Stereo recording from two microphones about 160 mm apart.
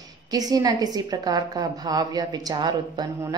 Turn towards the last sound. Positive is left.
turn(degrees=-25)  # may be behind; listen again after turning